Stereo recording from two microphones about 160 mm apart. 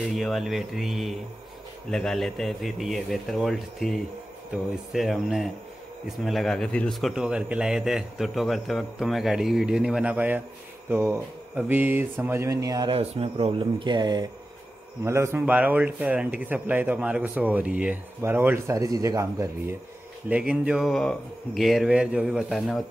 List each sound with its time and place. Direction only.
0.1 s speech: centre (ahead or behind); by 14.3 s 30° right (ahead or behind)
15.0 s speech: 15° right (ahead or behind)
20.2 s speech: 5° right (ahead or behind)